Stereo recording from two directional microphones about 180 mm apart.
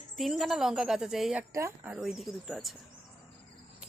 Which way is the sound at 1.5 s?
15° right (ahead or behind).